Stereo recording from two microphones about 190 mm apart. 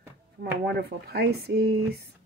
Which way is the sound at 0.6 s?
55° right (ahead or behind).